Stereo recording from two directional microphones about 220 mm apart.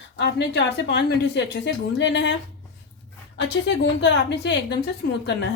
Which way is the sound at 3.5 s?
55° left (ahead or behind).